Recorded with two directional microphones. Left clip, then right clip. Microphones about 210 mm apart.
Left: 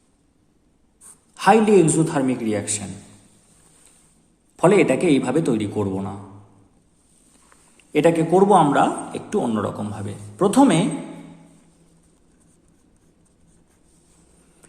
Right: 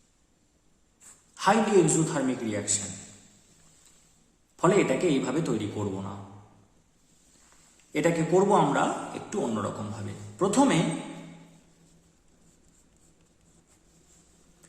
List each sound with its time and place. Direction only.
1.4 s a man's voice: 35° left (ahead or behind)
4.5 s a man's voice: 40° left (ahead or behind)
7.9 s a man's voice: 35° left (ahead or behind)